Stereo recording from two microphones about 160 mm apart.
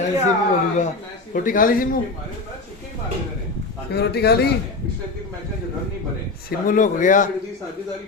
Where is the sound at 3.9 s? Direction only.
90° left.